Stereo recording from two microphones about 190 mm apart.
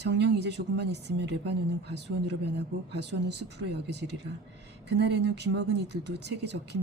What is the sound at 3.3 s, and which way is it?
Speech, 65° right (ahead or behind).